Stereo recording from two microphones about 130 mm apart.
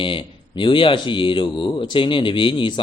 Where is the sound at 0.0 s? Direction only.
40° left (ahead or behind).